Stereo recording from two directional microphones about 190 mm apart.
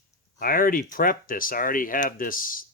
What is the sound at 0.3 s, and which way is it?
Speech, 50° left (ahead or behind).